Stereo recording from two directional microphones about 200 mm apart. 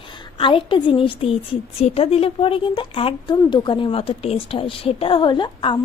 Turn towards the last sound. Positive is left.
turn(degrees=25)  # may be behind; listen again after turning